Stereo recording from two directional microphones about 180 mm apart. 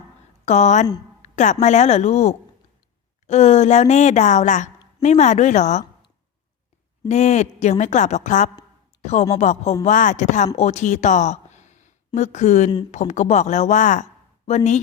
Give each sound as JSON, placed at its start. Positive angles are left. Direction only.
{"t": 0.4, "sound": "a woman's voice", "side_deg": 40}
{"t": 1.2, "sound": "a sound", "side_deg": 40}
{"t": 1.6, "sound": "a woman's voice", "side_deg": 40}
{"t": 7.1, "sound": "a woman's voice", "side_deg": 40}
{"t": 9.0, "sound": "a sound", "side_deg": 40}
{"t": 9.3, "sound": "a woman's voice", "side_deg": 40}